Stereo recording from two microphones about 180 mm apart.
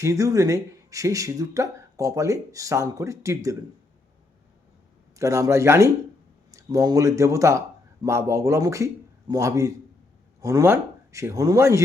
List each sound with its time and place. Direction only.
0.0 s speech: 20° right (ahead or behind)
5.1 s speech: 15° right (ahead or behind)